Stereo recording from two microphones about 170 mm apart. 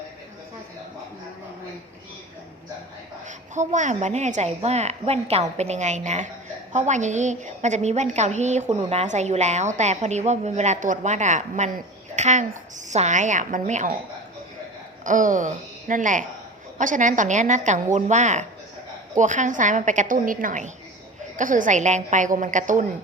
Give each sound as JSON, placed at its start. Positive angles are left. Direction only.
{"t": 3.2, "sound": "a woman's voice", "side_deg": -45}
{"t": 15.0, "sound": "a woman's voice", "side_deg": -50}